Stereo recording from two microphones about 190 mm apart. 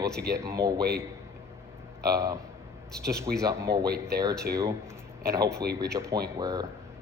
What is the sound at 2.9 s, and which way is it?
Speech, 5° left (ahead or behind).